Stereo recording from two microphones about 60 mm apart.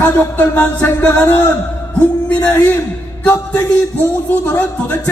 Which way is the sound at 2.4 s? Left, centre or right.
Left.